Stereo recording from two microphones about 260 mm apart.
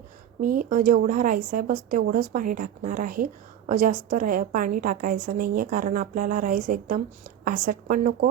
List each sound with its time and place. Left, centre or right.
0.4 s a woman's voice: right